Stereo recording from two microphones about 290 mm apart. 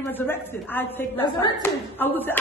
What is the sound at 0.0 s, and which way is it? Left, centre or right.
A woman's voice, centre.